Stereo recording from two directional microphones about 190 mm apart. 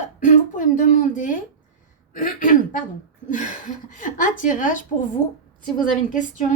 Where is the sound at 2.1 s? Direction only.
45° left (ahead or behind).